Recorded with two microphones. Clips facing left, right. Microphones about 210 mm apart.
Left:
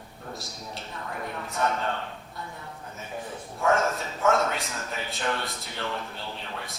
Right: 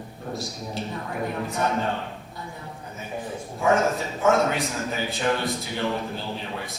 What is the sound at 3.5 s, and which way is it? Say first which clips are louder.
A man's voice: right 3 dB; centre (ahead or behind).